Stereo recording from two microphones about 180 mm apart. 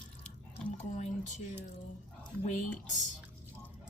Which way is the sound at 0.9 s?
40° left (ahead or behind).